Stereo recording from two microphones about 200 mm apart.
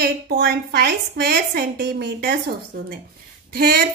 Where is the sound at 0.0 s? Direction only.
50° right (ahead or behind).